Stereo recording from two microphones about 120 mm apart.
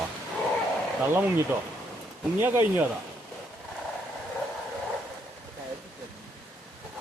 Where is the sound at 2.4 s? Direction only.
20° right (ahead or behind).